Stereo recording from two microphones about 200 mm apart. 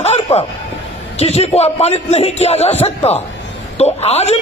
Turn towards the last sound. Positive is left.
turn(degrees=30)  # may be behind; listen again after turning